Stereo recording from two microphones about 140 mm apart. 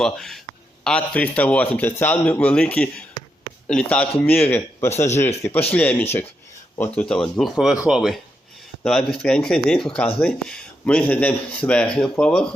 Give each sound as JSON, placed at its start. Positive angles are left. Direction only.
{"t": 0.0, "sound": "speech", "side_deg": 5}